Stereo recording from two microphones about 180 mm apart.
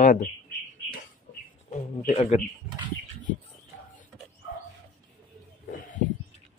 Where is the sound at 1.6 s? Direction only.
40° left (ahead or behind).